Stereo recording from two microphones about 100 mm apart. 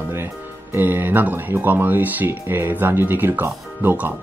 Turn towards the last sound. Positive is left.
turn(degrees=-20)  # may be behind; listen again after turning